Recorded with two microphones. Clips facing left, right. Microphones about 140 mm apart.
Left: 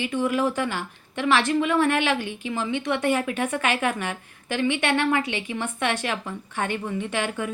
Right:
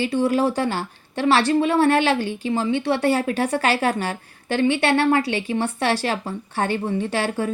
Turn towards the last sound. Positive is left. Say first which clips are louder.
# right 4 dB
turn(degrees=-35)  # may be behind; listen again after turning